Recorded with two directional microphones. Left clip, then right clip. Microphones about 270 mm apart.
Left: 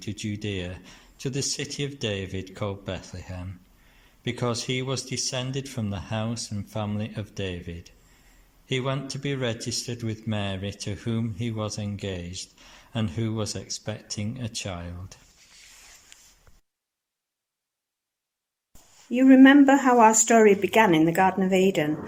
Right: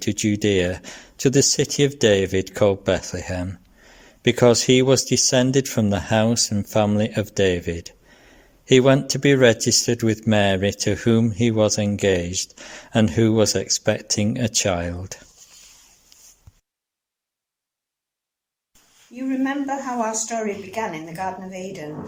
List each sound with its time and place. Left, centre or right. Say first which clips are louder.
0.0 s speech: right 12 dB; right
19.1 s speech: left 10 dB; left